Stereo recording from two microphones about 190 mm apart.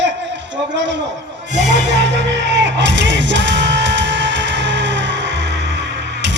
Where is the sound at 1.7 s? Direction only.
70° right (ahead or behind).